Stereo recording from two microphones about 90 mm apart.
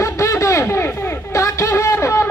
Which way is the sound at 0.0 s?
35° left (ahead or behind).